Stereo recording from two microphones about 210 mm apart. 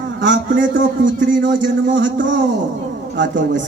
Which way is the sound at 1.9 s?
60° right (ahead or behind).